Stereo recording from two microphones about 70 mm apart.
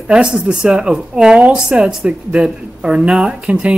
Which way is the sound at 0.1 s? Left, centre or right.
Centre.